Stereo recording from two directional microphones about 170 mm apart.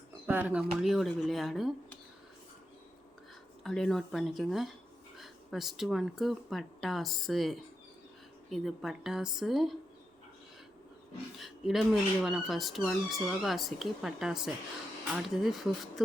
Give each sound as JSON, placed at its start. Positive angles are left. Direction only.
{"t": 0.3, "sound": "speech", "side_deg": -10}
{"t": 3.6, "sound": "speech", "side_deg": 0}
{"t": 11.3, "sound": "speech", "side_deg": 0}